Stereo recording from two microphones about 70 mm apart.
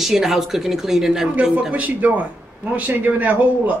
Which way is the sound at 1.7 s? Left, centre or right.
Right.